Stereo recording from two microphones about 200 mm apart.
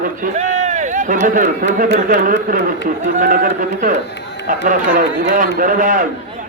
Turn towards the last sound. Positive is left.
turn(degrees=-45)  # may be behind; listen again after turning